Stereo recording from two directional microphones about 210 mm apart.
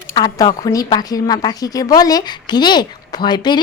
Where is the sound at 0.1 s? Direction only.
15° left (ahead or behind).